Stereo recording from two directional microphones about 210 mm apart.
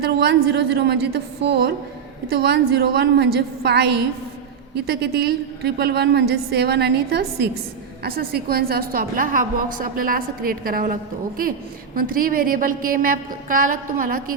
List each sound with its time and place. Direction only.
0.0 s a woman's voice: 50° right (ahead or behind)
11.9 s a woman's voice: 45° right (ahead or behind)